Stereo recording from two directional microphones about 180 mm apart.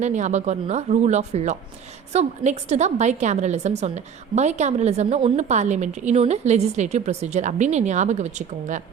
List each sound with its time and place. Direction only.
0.0 s a woman's voice: 40° right (ahead or behind)